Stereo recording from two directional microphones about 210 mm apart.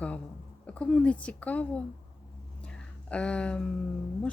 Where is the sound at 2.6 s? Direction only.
5° left (ahead or behind).